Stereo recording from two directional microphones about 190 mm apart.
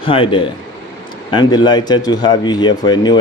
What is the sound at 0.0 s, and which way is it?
Speech, 25° left (ahead or behind).